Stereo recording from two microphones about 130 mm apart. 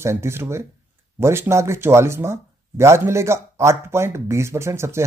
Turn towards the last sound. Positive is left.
turn(degrees=-20)  # may be behind; listen again after turning